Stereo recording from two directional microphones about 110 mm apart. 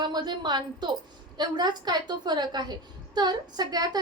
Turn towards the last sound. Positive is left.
turn(degrees=-35)  # may be behind; listen again after turning